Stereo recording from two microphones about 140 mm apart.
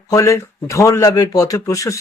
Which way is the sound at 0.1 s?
20° left (ahead or behind).